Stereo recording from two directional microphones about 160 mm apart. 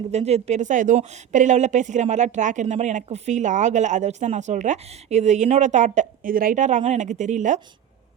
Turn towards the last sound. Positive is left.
turn(degrees=-50)  # may be behind; listen again after turning